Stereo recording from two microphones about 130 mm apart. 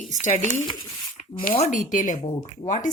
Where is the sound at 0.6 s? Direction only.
35° left (ahead or behind).